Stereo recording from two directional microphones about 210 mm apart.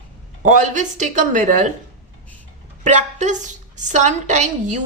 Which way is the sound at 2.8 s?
35° right (ahead or behind).